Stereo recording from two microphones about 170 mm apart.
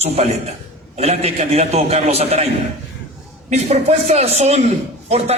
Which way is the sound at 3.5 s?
40° right (ahead or behind).